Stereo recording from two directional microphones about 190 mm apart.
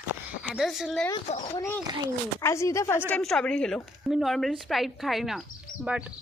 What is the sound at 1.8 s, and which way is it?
Speech, 20° right (ahead or behind).